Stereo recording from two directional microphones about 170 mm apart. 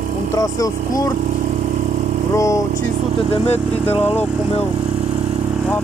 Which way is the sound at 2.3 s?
20° left (ahead or behind).